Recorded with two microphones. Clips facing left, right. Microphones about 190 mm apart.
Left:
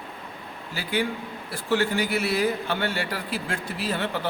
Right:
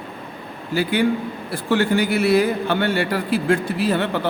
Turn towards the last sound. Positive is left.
turn(degrees=-60)  # may be behind; listen again after turning